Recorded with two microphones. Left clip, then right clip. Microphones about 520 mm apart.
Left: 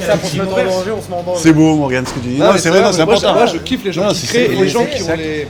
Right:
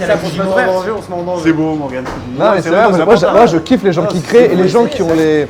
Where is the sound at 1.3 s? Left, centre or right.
Left.